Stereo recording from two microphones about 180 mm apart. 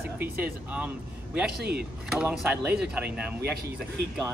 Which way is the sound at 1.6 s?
60° right (ahead or behind).